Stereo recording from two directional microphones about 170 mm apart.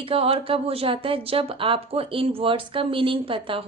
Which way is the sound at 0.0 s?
35° right (ahead or behind).